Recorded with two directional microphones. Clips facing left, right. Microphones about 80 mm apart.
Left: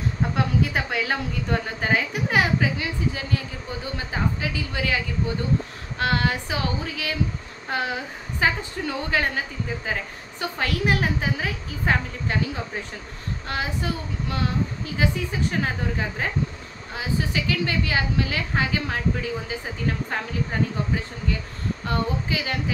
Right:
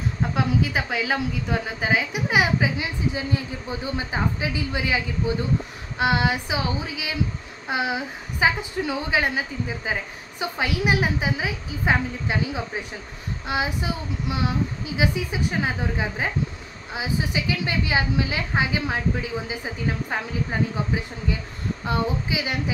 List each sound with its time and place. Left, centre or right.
0.3 s a woman's voice: centre
21.8 s a woman's voice: centre